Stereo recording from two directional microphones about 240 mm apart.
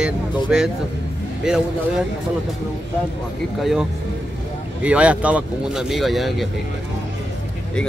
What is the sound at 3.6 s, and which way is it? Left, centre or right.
Speech, centre.